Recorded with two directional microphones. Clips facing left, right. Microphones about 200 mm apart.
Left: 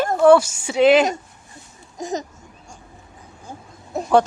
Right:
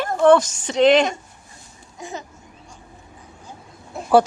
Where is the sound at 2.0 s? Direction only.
40° left (ahead or behind).